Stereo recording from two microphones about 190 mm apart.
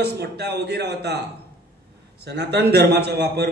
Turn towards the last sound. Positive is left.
turn(degrees=-60)  # may be behind; listen again after turning